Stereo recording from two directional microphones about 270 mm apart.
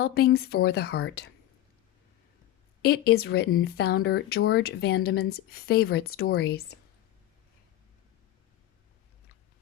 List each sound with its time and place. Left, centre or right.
0.0 s speech: left
2.8 s speech: left